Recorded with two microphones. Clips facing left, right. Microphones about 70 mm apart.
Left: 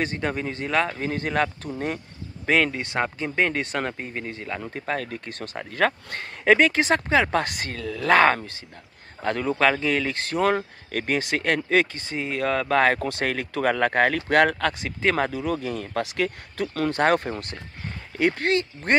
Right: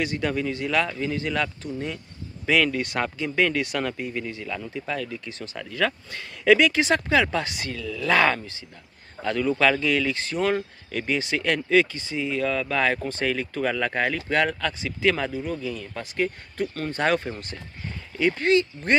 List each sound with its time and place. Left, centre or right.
0.0 s speech: left
2.4 s speech: left
7.2 s speech: left
15.3 s speech: left
17.0 s speech: left